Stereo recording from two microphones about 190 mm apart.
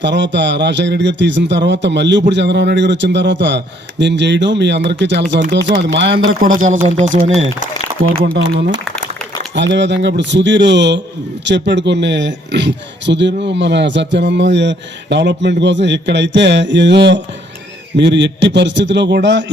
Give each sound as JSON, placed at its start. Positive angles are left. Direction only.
{"t": 0.0, "sound": "speech", "side_deg": -70}
{"t": 8.1, "sound": "speech", "side_deg": -55}